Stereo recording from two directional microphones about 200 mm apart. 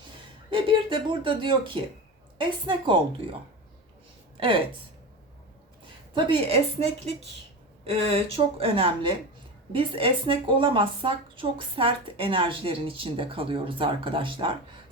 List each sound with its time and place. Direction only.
0.5 s a woman's voice: 25° right (ahead or behind)
4.4 s speech: 25° right (ahead or behind)
6.1 s a woman's voice: 25° right (ahead or behind)